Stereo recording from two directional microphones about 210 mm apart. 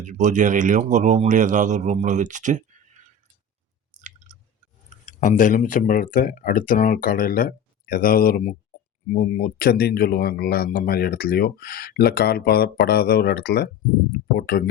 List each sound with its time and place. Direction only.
0.0 s speech: 35° right (ahead or behind)
5.0 s speech: 35° left (ahead or behind)